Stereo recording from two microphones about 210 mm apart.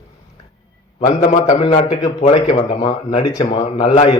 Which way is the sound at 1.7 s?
35° left (ahead or behind).